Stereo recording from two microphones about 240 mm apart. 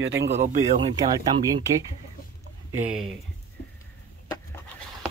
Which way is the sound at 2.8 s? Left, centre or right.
Centre.